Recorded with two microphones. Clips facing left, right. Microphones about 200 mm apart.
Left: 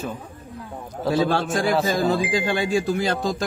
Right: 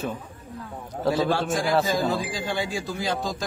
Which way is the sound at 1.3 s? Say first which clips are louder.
Left 2 dB; 65° left (ahead or behind).